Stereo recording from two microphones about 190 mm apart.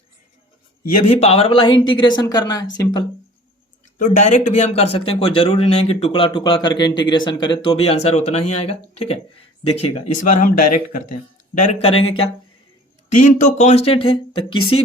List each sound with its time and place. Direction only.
1.2 s speech: 30° left (ahead or behind)
3.9 s speech: 40° left (ahead or behind)
13.1 s speech: 40° left (ahead or behind)